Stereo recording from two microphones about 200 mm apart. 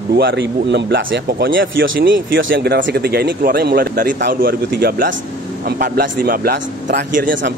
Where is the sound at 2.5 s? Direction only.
55° right (ahead or behind).